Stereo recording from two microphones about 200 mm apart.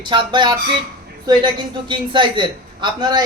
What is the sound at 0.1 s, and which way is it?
Speech, 25° right (ahead or behind).